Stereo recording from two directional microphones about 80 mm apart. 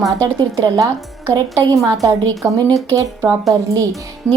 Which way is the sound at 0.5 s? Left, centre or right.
Right.